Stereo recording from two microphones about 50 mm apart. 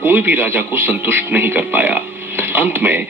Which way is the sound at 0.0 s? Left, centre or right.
Right.